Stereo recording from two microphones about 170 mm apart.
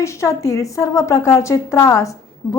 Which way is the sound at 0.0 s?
15° left (ahead or behind).